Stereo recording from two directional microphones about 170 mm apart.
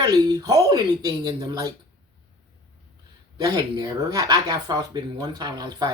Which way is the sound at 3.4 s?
20° right (ahead or behind).